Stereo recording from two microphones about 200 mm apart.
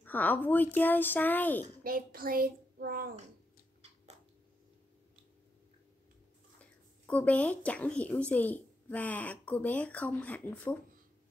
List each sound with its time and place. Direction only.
0.0 s speech: 10° left (ahead or behind)
1.8 s a child's voice: 45° right (ahead or behind)
6.6 s speech: 5° left (ahead or behind)